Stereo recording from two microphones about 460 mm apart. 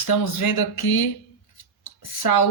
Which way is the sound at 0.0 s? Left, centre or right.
Left.